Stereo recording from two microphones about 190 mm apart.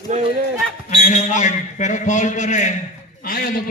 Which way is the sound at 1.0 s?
40° left (ahead or behind).